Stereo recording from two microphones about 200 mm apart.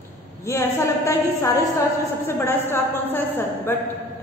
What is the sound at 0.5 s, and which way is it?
A woman's voice, 15° left (ahead or behind).